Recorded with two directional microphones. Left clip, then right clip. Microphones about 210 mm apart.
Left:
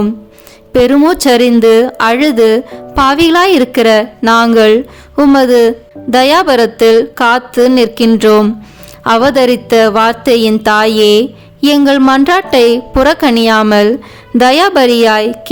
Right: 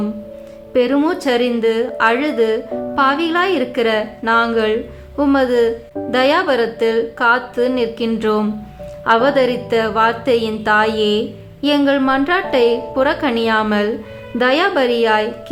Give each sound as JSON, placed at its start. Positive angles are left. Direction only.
{"t": 0.7, "sound": "speech", "side_deg": 50}